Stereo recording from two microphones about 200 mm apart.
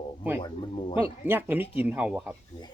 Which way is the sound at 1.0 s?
10° right (ahead or behind).